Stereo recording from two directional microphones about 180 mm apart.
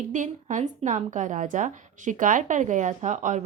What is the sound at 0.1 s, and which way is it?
Speech, 45° right (ahead or behind).